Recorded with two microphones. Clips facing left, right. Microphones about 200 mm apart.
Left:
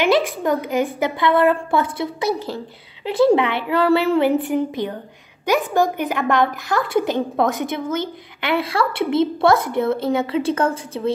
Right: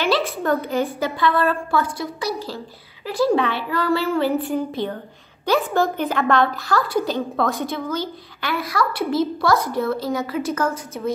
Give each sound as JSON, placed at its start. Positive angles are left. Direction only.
{"t": 0.0, "sound": "a woman's voice", "side_deg": 15}